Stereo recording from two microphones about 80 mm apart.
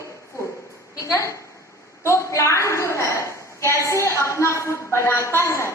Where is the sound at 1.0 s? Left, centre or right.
Left.